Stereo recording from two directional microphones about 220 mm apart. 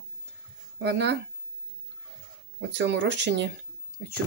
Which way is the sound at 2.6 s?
55° right (ahead or behind).